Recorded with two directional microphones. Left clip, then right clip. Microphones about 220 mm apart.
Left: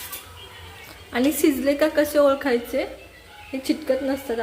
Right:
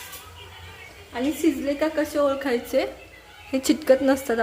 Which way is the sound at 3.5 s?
20° right (ahead or behind).